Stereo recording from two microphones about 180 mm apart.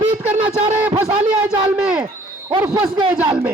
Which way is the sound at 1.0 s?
20° right (ahead or behind).